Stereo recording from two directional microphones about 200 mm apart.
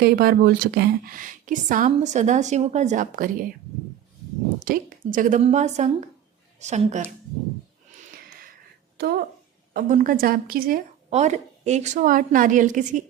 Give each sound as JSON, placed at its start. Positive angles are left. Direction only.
{"t": 0.0, "sound": "a woman's voice", "side_deg": -50}
{"t": 4.6, "sound": "a woman's voice", "side_deg": -45}
{"t": 9.0, "sound": "a woman's voice", "side_deg": -50}